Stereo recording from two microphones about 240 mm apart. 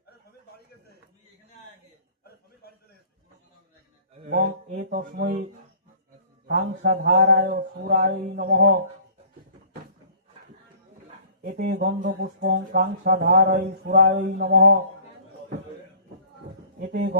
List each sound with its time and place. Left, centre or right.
4.3 s speech: right
6.5 s speech: right
11.4 s speech: right
16.8 s speech: right